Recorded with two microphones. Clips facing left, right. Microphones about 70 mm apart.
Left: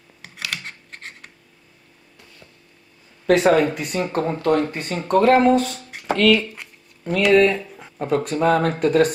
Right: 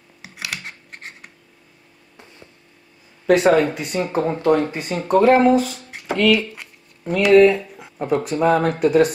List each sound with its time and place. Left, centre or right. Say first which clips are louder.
0.2 s scissors: even; centre
2.1 s a sound: right 4 dB; right
3.3 s speech: right 1 dB; centre